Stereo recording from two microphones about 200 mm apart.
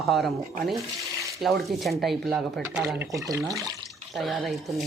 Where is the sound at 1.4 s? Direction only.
Centre (ahead or behind); by 3.5 s 15° right (ahead or behind).